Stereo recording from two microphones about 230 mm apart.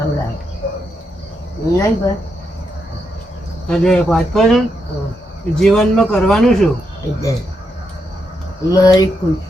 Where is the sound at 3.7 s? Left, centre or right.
Centre.